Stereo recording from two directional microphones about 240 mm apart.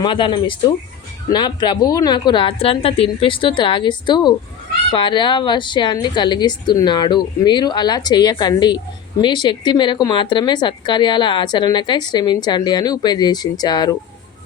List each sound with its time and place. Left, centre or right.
0.0 s a woman's voice: centre